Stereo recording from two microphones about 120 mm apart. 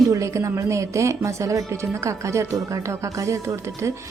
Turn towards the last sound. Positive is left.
turn(degrees=-25)  # may be behind; listen again after turning